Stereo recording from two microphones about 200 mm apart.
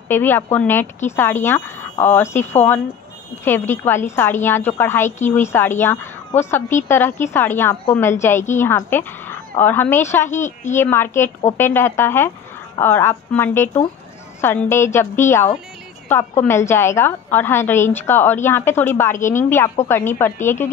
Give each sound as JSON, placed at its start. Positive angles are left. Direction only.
{"t": 0.1, "sound": "a woman's voice", "side_deg": 10}
{"t": 10.4, "sound": "a woman's voice", "side_deg": 35}
{"t": 10.8, "sound": "a woman's voice", "side_deg": 10}